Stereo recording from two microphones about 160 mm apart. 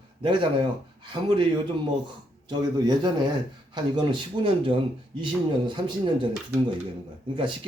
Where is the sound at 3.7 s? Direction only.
30° right (ahead or behind).